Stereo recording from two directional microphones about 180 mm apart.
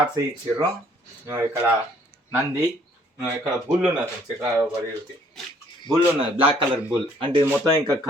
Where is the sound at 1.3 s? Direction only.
15° right (ahead or behind).